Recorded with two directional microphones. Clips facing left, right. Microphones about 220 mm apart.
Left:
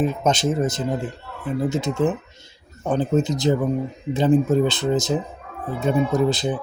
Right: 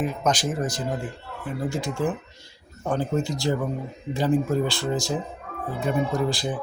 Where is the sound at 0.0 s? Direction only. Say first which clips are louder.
Left 4 dB; 25° left (ahead or behind).